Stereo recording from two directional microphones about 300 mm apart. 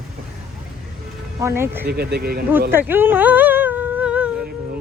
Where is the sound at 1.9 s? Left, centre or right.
Right.